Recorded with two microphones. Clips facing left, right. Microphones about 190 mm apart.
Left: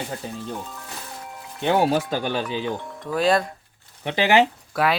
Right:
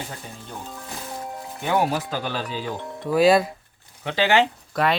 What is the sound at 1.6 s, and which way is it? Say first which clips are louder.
Speech: left 3 dB; 25° left (ahead or behind).